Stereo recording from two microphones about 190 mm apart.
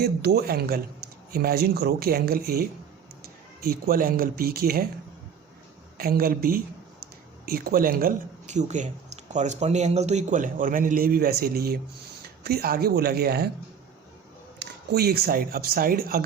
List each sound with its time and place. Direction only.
0.0 s speech: 60° right (ahead or behind)
6.0 s speech: 50° right (ahead or behind)
14.6 s speech: 55° right (ahead or behind)